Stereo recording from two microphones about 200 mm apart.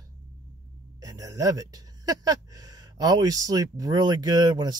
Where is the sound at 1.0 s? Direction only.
15° right (ahead or behind).